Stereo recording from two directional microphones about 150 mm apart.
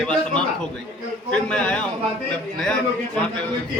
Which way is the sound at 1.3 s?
5° left (ahead or behind).